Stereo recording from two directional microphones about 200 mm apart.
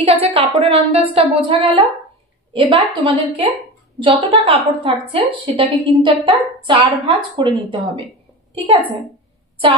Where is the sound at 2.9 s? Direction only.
25° right (ahead or behind).